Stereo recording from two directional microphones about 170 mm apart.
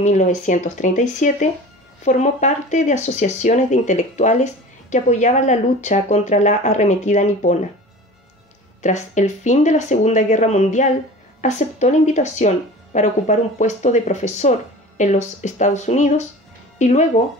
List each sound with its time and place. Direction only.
0.0 s speech: 45° left (ahead or behind)
8.8 s speech: 45° left (ahead or behind)